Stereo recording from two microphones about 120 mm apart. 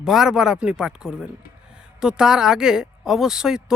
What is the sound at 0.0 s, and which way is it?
Speech, 5° right (ahead or behind).